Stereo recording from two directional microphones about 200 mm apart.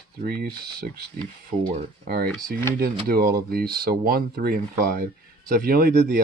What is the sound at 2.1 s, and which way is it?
Speech, 50° right (ahead or behind).